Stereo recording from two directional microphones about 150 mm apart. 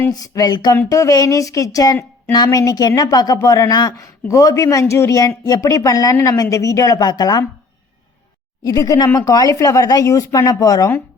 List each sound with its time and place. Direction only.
0.0 s speech: 25° left (ahead or behind)
8.6 s speech: 25° left (ahead or behind)